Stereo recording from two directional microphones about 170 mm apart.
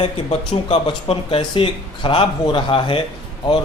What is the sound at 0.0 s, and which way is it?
Speech, 35° left (ahead or behind).